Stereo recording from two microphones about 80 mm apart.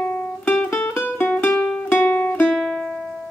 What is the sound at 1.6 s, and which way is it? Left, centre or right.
Music, centre.